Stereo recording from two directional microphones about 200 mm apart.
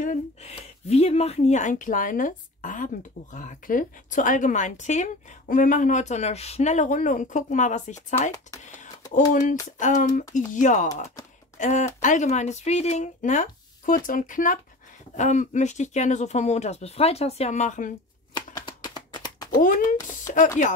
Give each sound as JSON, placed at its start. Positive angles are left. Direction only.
{"t": 0.0, "sound": "speech", "side_deg": 35}
{"t": 18.3, "sound": "a sound", "side_deg": 20}
{"t": 19.5, "sound": "speech", "side_deg": 45}